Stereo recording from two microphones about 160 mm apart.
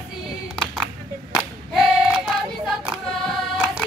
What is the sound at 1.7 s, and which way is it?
Child singing, centre (ahead or behind).